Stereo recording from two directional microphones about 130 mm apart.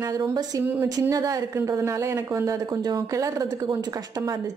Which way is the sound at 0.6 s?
15° right (ahead or behind).